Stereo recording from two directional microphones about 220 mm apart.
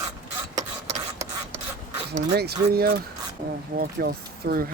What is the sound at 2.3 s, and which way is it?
Speech, 45° right (ahead or behind).